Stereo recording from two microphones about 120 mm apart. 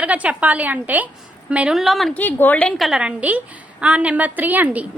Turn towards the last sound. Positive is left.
turn(degrees=-10)  # may be behind; listen again after turning